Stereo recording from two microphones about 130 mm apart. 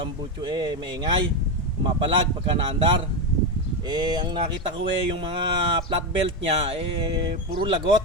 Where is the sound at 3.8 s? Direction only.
35° right (ahead or behind).